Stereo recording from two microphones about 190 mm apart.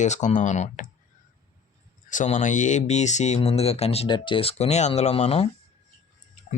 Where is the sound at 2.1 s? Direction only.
40° left (ahead or behind).